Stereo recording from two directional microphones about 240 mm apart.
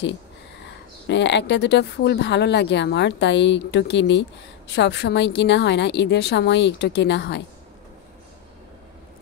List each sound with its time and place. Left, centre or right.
1.0 s speech: left